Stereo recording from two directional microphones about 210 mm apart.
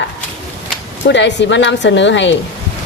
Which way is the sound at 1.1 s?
55° left (ahead or behind).